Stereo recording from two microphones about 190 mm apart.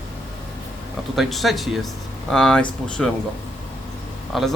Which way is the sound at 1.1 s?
Centre (ahead or behind).